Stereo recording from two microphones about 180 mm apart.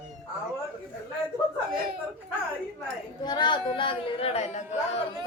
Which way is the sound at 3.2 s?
25° left (ahead or behind).